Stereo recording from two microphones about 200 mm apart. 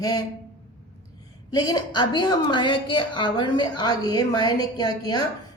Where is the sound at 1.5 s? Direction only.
20° left (ahead or behind).